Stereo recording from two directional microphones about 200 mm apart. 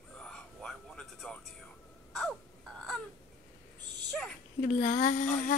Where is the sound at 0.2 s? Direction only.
5° left (ahead or behind).